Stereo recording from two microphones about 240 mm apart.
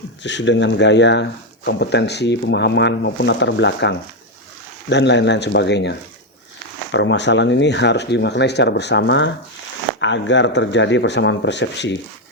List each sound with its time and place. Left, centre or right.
0.2 s speech: left